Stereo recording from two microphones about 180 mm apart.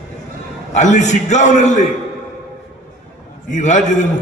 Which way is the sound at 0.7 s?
40° left (ahead or behind).